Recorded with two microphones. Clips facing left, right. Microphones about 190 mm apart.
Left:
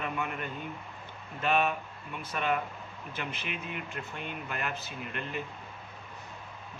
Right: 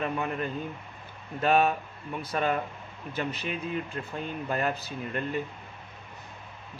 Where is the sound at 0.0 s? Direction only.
35° right (ahead or behind).